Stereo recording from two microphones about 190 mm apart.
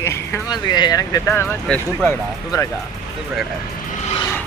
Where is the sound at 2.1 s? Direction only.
15° left (ahead or behind).